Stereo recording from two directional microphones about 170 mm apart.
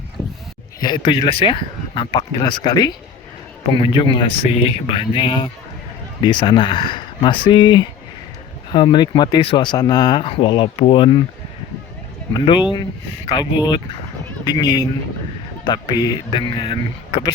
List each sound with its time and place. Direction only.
0.8 s speech: 25° left (ahead or behind)
12.3 s speech: 25° left (ahead or behind)